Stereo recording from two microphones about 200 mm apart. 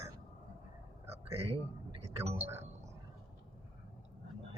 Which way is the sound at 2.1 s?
30° right (ahead or behind).